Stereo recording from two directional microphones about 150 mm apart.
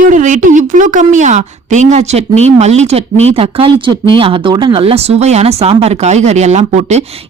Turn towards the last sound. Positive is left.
turn(degrees=-50)  # may be behind; listen again after turning